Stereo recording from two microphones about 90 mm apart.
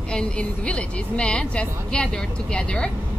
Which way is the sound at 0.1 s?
10° left (ahead or behind).